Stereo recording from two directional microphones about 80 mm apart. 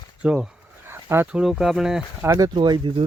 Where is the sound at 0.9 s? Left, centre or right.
Right.